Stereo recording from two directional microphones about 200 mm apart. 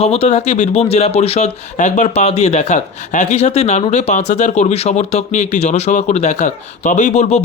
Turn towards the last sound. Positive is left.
turn(degrees=35)  # may be behind; listen again after turning